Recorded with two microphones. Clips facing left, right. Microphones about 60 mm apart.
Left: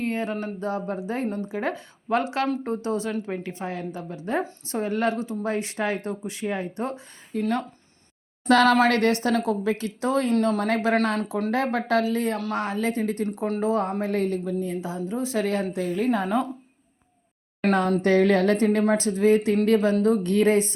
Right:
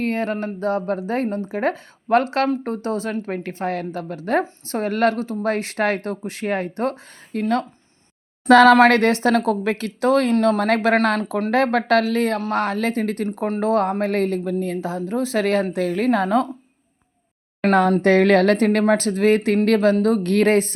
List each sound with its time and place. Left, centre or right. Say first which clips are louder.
0.0 s a woman's voice: right 4 dB; right
8.7 s a woman's voice: right 6 dB; right
11.2 s a woman's voice: right 3 dB; right
11.5 s speech: right 6 dB; right
12.5 s a woman's voice: right 5 dB; right
13.2 s speech: right 3 dB; right
13.6 s a woman's voice: right 6 dB; right
14.0 s a woman's voice: right 4 dB; right
14.8 s speech: right 5 dB; right
17.6 s a woman's voice: right 5 dB; right
18.0 s speech: right 2 dB; right
19.6 s speech: right 5 dB; right
19.9 s speech: right 3 dB; right